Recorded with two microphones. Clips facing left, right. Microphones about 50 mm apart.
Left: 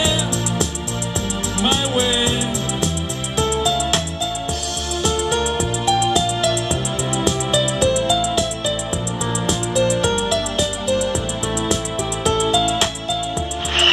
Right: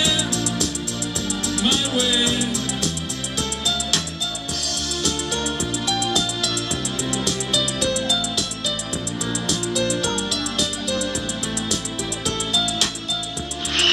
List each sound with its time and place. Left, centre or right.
0.0 s music: left
5.0 s music: left
12.3 s music: left